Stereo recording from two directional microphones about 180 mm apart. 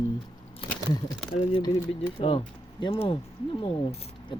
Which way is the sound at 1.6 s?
30° left (ahead or behind).